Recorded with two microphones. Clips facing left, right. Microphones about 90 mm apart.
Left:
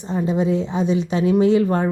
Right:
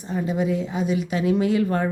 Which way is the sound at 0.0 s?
25° left (ahead or behind).